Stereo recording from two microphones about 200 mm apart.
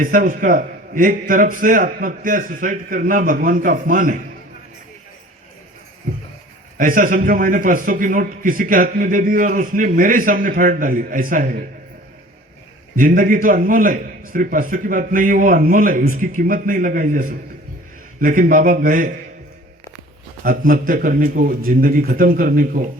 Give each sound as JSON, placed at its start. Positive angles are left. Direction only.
{"t": 0.0, "sound": "a man's voice", "side_deg": -45}
{"t": 6.7, "sound": "a man's voice", "side_deg": -45}
{"t": 13.0, "sound": "a man's voice", "side_deg": -45}
{"t": 20.4, "sound": "a man's voice", "side_deg": -45}